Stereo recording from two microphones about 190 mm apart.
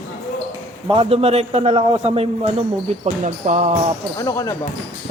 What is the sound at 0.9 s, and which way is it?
Speech, 30° right (ahead or behind).